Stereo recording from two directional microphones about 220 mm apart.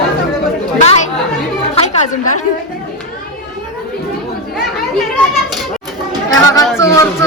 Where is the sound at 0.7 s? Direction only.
30° left (ahead or behind).